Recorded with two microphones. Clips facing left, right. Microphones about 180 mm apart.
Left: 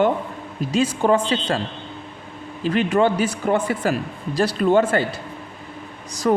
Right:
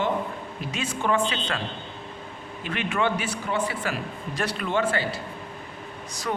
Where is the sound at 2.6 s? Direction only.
35° left (ahead or behind).